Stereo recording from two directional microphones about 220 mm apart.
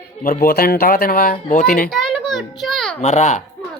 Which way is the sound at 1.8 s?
Centre (ahead or behind).